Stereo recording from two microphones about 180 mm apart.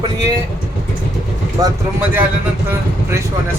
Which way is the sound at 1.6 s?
10° right (ahead or behind).